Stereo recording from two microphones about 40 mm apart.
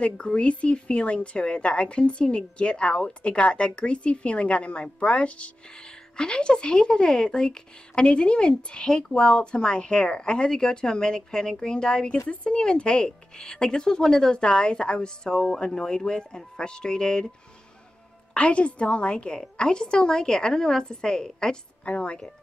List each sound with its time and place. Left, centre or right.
0.0 s speech: left
6.1 s speech: left
18.3 s a woman's voice: left
21.8 s speech: left